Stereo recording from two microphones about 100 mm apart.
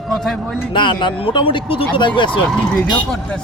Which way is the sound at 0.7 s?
50° left (ahead or behind).